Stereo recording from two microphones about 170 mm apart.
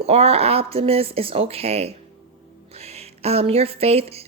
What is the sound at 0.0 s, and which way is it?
Speech, 35° right (ahead or behind).